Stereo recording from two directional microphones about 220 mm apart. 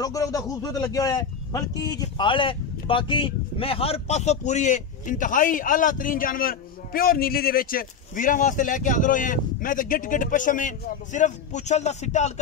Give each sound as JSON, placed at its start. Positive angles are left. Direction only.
{"t": 0.0, "sound": "speech", "side_deg": 15}